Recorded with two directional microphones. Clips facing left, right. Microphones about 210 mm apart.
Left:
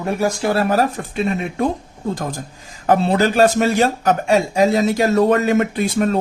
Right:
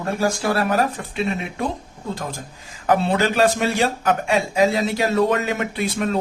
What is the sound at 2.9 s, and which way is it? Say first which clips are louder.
Speech: left 3 dB; 40° left (ahead or behind).